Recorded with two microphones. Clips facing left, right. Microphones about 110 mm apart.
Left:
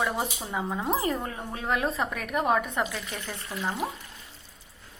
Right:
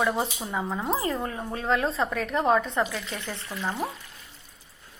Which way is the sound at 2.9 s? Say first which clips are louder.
Right 2 dB; 25° right (ahead or behind).